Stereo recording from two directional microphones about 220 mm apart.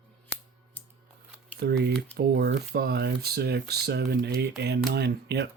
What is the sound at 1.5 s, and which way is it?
Speech, 50° right (ahead or behind).